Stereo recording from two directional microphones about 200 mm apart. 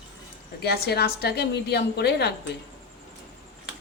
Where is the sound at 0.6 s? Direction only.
55° left (ahead or behind).